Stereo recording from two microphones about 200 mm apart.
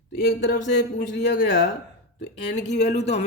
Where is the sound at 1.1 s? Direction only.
60° left (ahead or behind).